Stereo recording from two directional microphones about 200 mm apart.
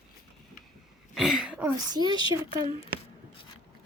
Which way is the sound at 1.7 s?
20° right (ahead or behind).